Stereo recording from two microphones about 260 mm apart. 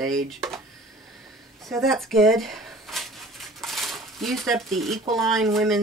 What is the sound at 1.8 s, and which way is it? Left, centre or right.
Speech, centre.